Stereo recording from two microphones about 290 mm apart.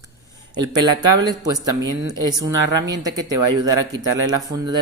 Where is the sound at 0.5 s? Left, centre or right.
Centre.